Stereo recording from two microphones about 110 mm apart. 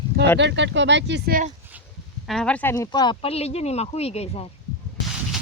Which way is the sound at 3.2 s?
70° left (ahead or behind).